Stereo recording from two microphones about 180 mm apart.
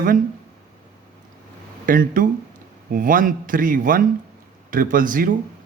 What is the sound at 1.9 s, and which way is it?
Speech, 50° right (ahead or behind).